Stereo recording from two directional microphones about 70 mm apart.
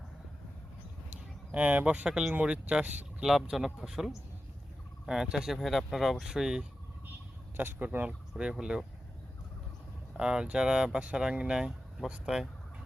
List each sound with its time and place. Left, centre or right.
1.1 s speech: right
3.2 s speech: centre
5.5 s speech: centre
7.5 s speech: right
8.4 s speech: centre
10.2 s speech: centre